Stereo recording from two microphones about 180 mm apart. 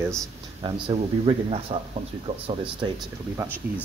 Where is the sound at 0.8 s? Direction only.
30° right (ahead or behind).